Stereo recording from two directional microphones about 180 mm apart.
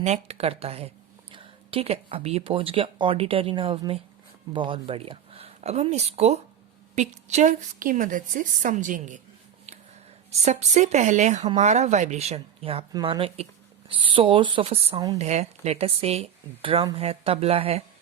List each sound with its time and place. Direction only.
0.0 s a woman's voice: 35° right (ahead or behind)
10.4 s speech: 40° right (ahead or behind)